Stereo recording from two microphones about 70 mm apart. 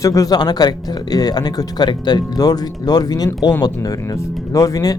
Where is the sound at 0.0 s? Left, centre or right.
Left.